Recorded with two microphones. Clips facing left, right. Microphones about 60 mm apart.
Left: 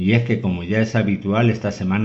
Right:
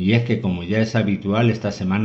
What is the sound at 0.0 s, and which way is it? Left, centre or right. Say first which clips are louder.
A man's voice: left 1 dB; centre.